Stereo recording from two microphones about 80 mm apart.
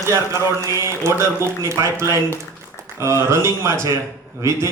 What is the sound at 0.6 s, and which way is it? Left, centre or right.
A man's voice, right.